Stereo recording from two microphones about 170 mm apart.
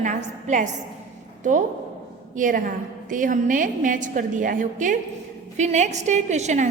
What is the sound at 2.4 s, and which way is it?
A woman's voice, 50° right (ahead or behind).